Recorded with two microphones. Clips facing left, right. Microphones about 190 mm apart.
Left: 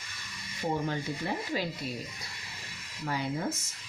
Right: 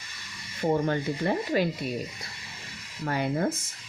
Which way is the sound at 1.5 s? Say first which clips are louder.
Right 8 dB; 60° right (ahead or behind).